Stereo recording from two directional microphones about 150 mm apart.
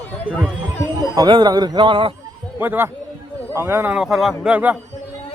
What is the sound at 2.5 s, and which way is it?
A man's voice, 15° right (ahead or behind).